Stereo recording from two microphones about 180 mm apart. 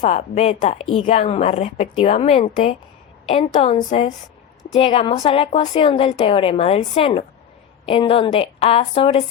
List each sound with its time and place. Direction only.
0.0 s a woman's voice: 40° left (ahead or behind)